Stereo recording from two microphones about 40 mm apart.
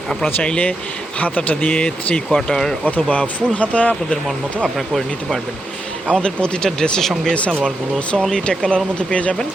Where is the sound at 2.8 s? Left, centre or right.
Left.